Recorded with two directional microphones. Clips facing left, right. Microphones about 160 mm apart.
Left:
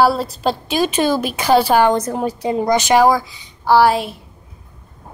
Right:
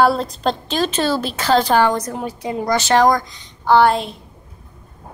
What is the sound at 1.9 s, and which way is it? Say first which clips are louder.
A woman's voice: left 4 dB; 25° left (ahead or behind).